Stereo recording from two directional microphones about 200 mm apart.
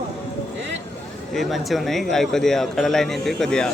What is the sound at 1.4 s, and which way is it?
Speech, centre (ahead or behind).